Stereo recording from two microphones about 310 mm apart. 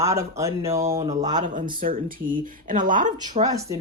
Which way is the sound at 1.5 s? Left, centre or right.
Right.